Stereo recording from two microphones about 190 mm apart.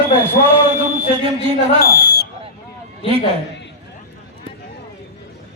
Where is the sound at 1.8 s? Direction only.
55° left (ahead or behind).